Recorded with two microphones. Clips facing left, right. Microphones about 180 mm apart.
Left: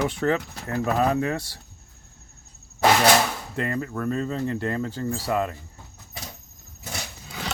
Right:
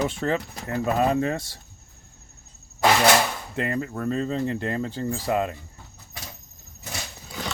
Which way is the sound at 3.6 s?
20° right (ahead or behind).